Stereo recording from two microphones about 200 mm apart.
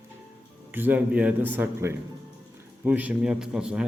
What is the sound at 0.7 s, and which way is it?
A man's voice, 10° right (ahead or behind).